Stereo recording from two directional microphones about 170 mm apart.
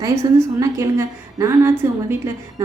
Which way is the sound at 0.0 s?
20° right (ahead or behind).